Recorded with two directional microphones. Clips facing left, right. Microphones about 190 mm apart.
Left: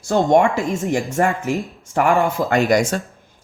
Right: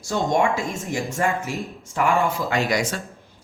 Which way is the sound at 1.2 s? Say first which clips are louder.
Left 4 dB; 50° left (ahead or behind).